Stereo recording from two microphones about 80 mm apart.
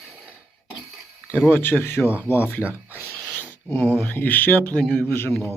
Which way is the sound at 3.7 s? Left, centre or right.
Left.